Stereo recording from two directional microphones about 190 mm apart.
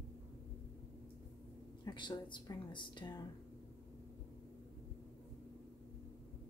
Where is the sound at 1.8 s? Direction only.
25° left (ahead or behind).